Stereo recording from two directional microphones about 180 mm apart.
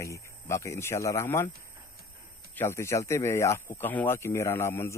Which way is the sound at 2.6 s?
15° left (ahead or behind).